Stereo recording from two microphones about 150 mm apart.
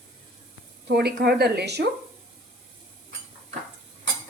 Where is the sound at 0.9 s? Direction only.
90° right.